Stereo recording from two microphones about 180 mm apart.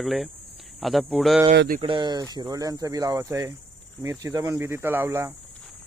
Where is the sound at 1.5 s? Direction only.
55° right (ahead or behind).